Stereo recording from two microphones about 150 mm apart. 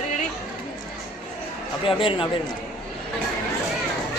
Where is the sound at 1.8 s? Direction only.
35° left (ahead or behind).